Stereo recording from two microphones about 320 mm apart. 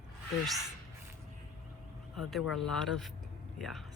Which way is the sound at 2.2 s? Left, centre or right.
Centre.